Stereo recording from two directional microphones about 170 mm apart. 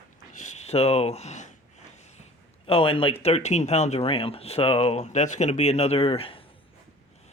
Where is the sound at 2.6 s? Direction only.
35° left (ahead or behind).